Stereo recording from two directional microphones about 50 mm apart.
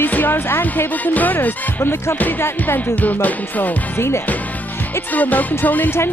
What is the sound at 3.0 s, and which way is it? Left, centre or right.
Speech, left.